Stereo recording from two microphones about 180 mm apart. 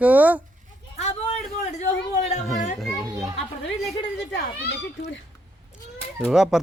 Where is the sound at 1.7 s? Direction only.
40° left (ahead or behind).